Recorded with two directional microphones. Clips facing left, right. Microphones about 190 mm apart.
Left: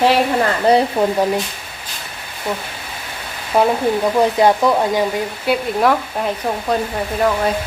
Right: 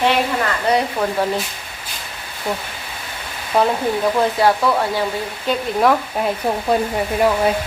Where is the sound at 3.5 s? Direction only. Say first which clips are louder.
Left 2 dB; 5° left (ahead or behind).